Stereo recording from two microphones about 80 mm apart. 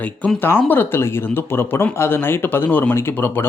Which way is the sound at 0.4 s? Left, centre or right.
Left.